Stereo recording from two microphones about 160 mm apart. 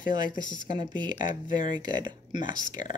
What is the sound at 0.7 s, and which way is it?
Speech, 30° right (ahead or behind).